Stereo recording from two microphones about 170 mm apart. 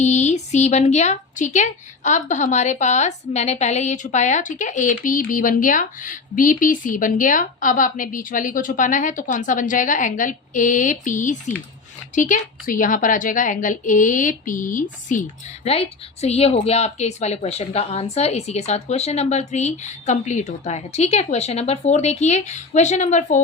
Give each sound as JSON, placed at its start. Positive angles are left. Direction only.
{"t": 0.0, "sound": "a woman's voice", "side_deg": 45}